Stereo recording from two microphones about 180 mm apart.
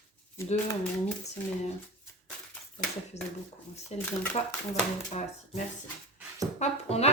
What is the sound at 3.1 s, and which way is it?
Speech, 75° left (ahead or behind).